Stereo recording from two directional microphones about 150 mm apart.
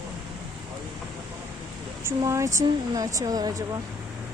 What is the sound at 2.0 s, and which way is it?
Speech, 20° right (ahead or behind).